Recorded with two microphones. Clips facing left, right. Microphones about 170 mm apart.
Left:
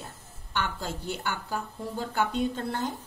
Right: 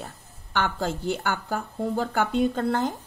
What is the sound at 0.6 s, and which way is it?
Speech, 60° right (ahead or behind).